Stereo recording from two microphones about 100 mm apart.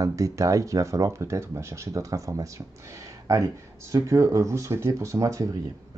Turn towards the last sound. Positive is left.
turn(degrees=-30)  # may be behind; listen again after turning